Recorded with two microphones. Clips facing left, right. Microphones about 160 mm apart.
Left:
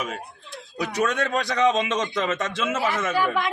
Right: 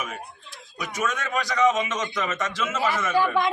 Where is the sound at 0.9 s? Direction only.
30° left (ahead or behind).